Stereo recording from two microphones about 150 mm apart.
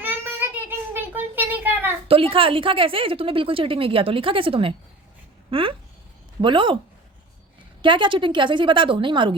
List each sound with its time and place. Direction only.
0.0 s child singing: 10° right (ahead or behind)
0.9 s a sound: 10° right (ahead or behind)
2.0 s a woman's voice: 40° right (ahead or behind)
7.8 s a woman's voice: 30° right (ahead or behind)